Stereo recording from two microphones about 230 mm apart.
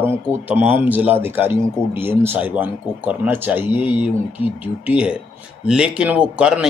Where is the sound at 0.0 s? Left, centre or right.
Centre.